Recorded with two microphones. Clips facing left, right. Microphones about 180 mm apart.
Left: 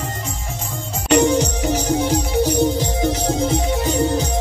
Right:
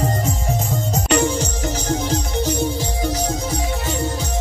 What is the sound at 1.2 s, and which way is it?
Music, 15° left (ahead or behind).